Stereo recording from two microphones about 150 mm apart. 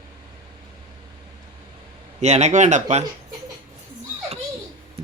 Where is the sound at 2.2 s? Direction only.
50° right (ahead or behind).